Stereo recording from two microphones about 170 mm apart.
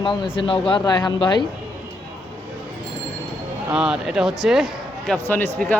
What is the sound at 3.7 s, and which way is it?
Speech, 5° right (ahead or behind).